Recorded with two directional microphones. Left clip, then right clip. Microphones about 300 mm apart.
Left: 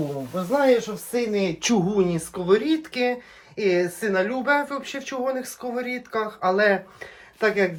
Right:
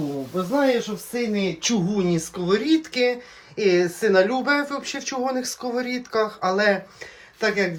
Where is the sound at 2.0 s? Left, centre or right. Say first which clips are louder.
Left 1 dB; centre.